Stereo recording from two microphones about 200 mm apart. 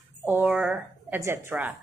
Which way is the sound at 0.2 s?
10° right (ahead or behind).